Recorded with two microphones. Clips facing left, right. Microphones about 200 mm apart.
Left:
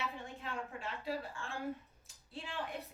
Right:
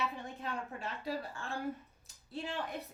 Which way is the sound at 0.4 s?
40° right (ahead or behind).